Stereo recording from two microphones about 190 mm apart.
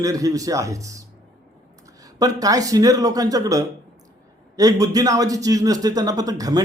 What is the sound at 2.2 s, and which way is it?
A man's voice, 20° right (ahead or behind).